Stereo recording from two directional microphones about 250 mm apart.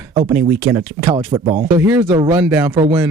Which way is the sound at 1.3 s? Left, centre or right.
Right.